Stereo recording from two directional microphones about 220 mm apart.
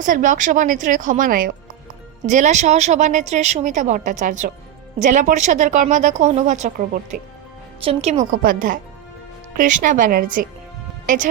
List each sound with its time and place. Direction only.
0.0 s a woman's voice: 35° right (ahead or behind)